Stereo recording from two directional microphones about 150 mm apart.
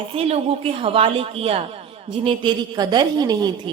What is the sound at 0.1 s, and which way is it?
A woman's voice, 40° right (ahead or behind).